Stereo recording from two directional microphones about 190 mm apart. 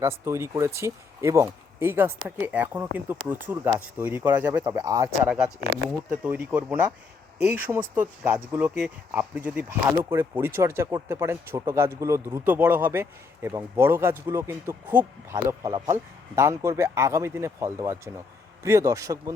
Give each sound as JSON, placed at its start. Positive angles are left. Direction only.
{"t": 0.0, "sound": "speech", "side_deg": -15}
{"t": 6.2, "sound": "speech", "side_deg": -10}